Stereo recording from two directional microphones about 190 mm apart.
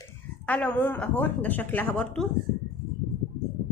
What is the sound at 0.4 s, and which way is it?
Speech, 10° left (ahead or behind).